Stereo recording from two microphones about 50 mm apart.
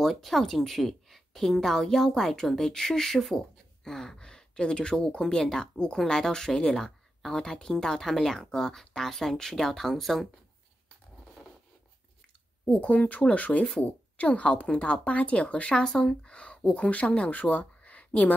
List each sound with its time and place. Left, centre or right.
0.0 s a woman's voice: centre
12.6 s speech: left
15.8 s speech: centre